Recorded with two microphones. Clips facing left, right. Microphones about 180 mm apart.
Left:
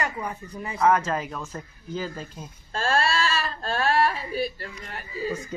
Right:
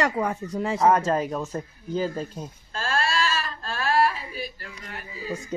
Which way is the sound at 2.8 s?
35° left (ahead or behind).